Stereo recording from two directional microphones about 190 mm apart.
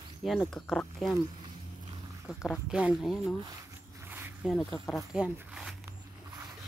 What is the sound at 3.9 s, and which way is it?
Zipper, 10° right (ahead or behind).